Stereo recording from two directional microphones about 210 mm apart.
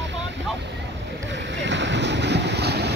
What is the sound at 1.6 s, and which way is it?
Boat, 60° right (ahead or behind).